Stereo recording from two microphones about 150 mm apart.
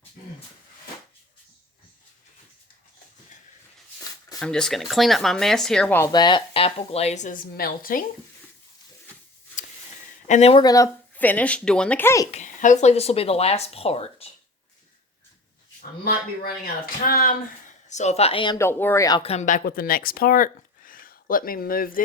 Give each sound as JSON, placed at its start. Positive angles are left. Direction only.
{"t": 4.4, "sound": "speech", "side_deg": 5}
{"t": 6.0, "sound": "speech", "side_deg": 25}
{"t": 10.2, "sound": "speech", "side_deg": 50}
{"t": 10.6, "sound": "speech", "side_deg": 25}
{"t": 11.1, "sound": "a woman's voice", "side_deg": 10}
{"t": 12.3, "sound": "speech", "side_deg": 55}
{"t": 15.8, "sound": "speech", "side_deg": 75}
{"t": 17.8, "sound": "speech", "side_deg": 50}
{"t": 18.5, "sound": "speech", "side_deg": 15}
{"t": 19.2, "sound": "speech", "side_deg": 45}